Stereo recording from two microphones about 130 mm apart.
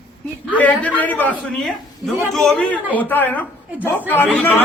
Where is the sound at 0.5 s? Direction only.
10° left (ahead or behind).